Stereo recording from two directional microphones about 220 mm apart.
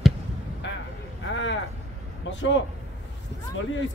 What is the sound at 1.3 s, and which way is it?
Vehicle, 55° left (ahead or behind).